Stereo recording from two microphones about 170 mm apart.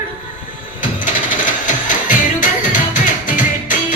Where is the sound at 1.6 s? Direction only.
50° left (ahead or behind).